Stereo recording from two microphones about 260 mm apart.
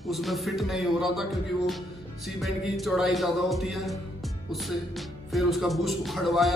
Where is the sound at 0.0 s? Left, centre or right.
Centre.